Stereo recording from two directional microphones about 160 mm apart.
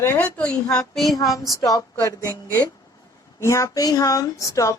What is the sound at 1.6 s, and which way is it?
Speech, 20° left (ahead or behind).